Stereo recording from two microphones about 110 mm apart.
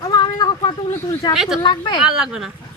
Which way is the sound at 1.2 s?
40° left (ahead or behind).